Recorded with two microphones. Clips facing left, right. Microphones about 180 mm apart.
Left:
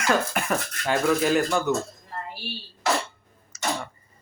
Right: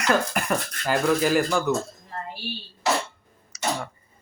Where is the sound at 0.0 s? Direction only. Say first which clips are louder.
Right 1 dB; centre (ahead or behind).